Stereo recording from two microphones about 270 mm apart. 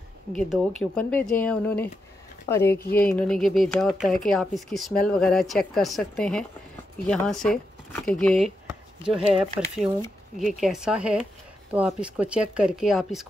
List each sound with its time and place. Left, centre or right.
0.3 s speech: centre
2.7 s speech: left
3.1 s speech: centre